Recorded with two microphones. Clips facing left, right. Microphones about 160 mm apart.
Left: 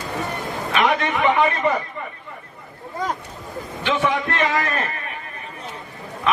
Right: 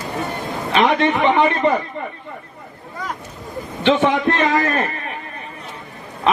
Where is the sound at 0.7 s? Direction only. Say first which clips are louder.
Right 4 dB; 25° right (ahead or behind).